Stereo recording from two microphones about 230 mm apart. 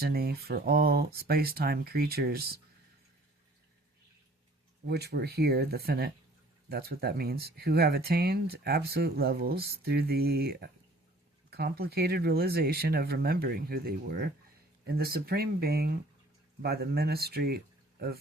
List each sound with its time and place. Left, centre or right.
0.0 s speech: right
4.9 s speech: right